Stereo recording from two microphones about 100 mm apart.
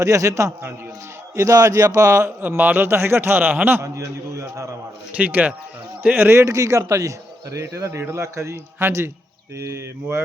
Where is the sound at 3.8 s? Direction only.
30° right (ahead or behind).